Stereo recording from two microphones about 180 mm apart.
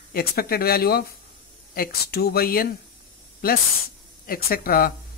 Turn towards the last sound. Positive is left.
turn(degrees=55)  # may be behind; listen again after turning